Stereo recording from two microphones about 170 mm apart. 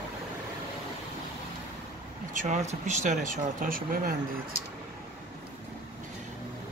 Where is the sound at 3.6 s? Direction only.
55° right (ahead or behind).